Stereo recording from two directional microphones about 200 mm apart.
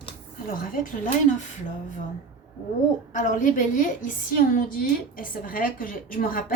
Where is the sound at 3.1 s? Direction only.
40° left (ahead or behind).